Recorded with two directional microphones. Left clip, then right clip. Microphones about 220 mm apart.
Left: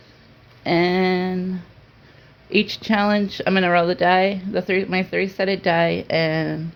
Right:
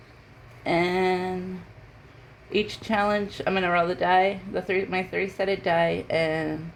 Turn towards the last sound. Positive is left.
turn(degrees=45)  # may be behind; listen again after turning